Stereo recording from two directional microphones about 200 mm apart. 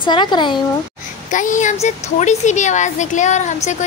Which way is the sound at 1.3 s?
40° left (ahead or behind).